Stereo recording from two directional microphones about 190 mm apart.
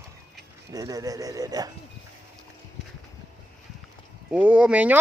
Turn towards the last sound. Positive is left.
turn(degrees=-5)  # may be behind; listen again after turning